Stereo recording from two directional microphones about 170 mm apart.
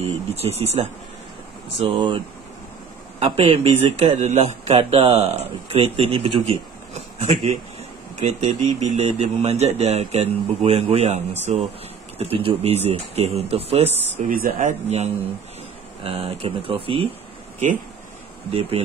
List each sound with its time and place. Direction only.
0.0 s speech: 35° right (ahead or behind)
3.2 s speech: 35° right (ahead or behind)
14.3 s speech: 55° right (ahead or behind); by 17.1 s 35° right (ahead or behind)
18.5 s speech: 35° right (ahead or behind)